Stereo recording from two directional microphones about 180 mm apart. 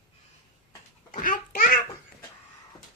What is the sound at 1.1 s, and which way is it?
Speech, 45° left (ahead or behind).